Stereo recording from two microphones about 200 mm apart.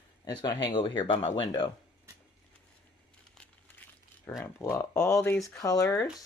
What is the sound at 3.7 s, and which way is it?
Speech, 10° left (ahead or behind).